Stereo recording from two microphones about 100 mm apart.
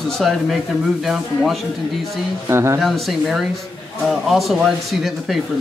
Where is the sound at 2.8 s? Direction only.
Centre (ahead or behind).